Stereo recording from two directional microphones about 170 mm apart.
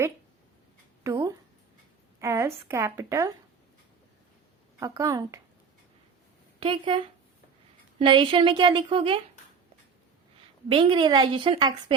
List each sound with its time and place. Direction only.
1.0 s a sound: 15° right (ahead or behind)
2.1 s a woman's voice: 15° right (ahead or behind)
4.8 s a woman's voice: 20° right (ahead or behind)
6.6 s a woman's voice: 30° right (ahead or behind)
10.7 s a woman's voice: 30° right (ahead or behind)